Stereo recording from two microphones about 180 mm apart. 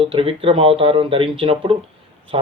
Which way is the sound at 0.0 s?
30° right (ahead or behind).